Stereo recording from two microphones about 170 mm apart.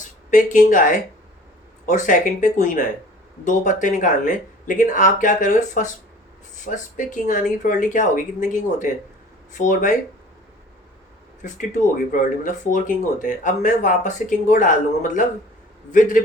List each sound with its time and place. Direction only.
0.3 s speech: 50° left (ahead or behind)
11.4 s speech: 50° left (ahead or behind)